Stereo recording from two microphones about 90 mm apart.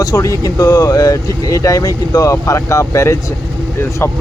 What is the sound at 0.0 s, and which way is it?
Speech, 40° left (ahead or behind).